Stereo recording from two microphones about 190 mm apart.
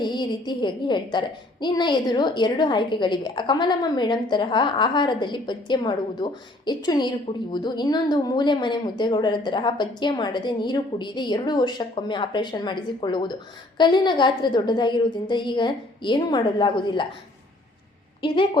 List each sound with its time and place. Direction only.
0.0 s a woman's voice: 25° left (ahead or behind)